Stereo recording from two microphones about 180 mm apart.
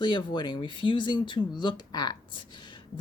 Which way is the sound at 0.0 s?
25° left (ahead or behind).